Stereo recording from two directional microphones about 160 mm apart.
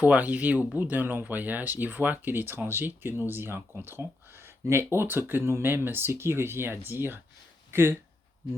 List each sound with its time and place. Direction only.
0.0 s speech: 10° right (ahead or behind)